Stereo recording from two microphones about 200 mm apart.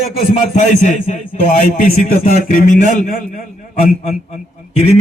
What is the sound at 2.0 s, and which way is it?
A man's voice, 45° left (ahead or behind).